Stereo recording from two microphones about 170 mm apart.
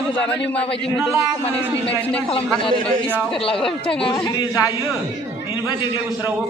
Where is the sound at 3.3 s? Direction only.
30° left (ahead or behind).